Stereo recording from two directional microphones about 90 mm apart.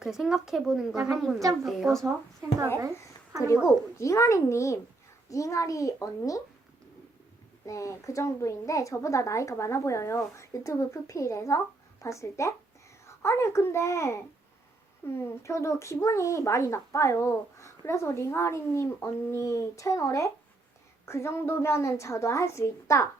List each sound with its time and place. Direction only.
0.0 s speech: 5° right (ahead or behind)
3.4 s speech: 35° left (ahead or behind)
7.7 s speech: 35° left (ahead or behind)